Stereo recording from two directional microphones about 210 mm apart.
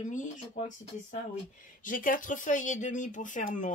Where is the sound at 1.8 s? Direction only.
40° left (ahead or behind).